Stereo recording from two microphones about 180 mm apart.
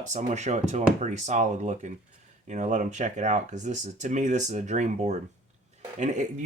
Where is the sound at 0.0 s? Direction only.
40° right (ahead or behind).